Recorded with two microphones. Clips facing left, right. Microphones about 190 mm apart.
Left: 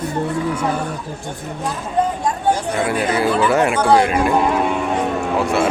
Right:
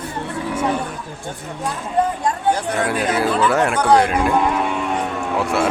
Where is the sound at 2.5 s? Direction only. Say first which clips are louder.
Left 2 dB; 10° left (ahead or behind).